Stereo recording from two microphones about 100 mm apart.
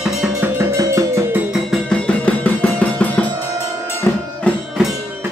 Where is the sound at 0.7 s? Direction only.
30° right (ahead or behind).